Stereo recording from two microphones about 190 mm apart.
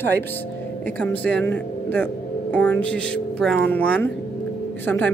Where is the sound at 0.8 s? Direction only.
10° left (ahead or behind).